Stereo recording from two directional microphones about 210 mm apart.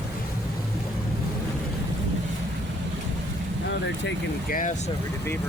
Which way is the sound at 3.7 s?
55° left (ahead or behind).